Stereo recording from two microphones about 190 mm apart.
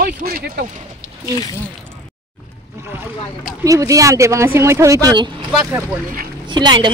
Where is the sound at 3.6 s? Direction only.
15° right (ahead or behind).